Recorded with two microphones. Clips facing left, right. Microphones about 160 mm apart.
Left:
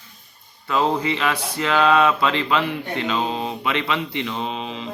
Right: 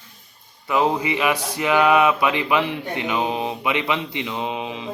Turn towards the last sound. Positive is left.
turn(degrees=-15)  # may be behind; listen again after turning